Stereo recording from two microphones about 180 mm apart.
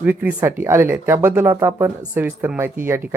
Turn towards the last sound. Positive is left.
turn(degrees=-15)  # may be behind; listen again after turning